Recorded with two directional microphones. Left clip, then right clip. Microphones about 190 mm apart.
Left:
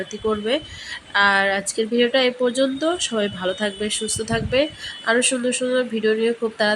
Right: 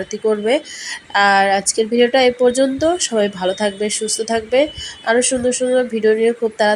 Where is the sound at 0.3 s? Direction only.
15° right (ahead or behind).